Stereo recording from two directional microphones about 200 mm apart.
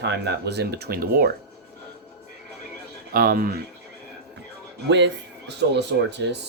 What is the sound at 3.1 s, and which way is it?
Speech, 45° right (ahead or behind).